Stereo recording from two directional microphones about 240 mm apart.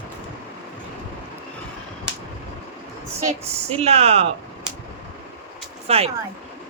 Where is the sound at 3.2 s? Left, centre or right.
Right.